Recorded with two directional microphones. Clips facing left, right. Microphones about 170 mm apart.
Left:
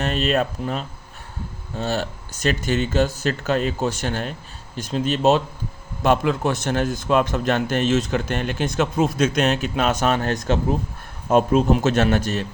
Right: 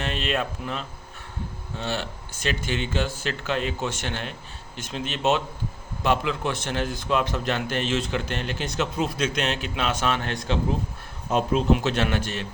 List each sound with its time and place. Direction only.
0.0 s a man's voice: 40° left (ahead or behind)